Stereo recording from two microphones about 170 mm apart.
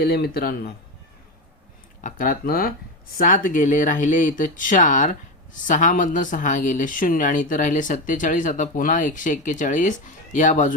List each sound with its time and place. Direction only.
0.0 s speech: 65° left (ahead or behind)
2.0 s speech: 50° left (ahead or behind)